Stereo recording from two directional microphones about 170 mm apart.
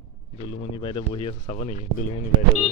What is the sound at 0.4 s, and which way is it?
Speech, 30° left (ahead or behind).